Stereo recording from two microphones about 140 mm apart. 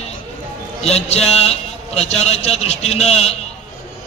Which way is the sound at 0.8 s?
50° left (ahead or behind).